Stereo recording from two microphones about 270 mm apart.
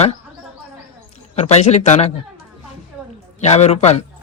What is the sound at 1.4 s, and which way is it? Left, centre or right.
Speech, left.